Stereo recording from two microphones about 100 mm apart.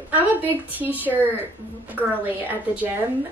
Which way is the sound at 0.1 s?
20° right (ahead or behind).